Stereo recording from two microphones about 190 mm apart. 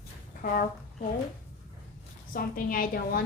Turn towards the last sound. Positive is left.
turn(degrees=50)  # may be behind; listen again after turning